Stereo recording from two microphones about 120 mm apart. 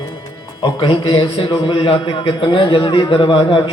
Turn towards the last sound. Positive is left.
turn(degrees=50)  # may be behind; listen again after turning